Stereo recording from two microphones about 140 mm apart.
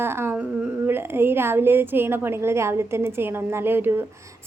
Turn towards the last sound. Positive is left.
turn(degrees=-15)  # may be behind; listen again after turning